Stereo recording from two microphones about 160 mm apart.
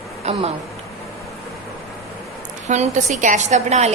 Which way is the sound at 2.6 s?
45° right (ahead or behind).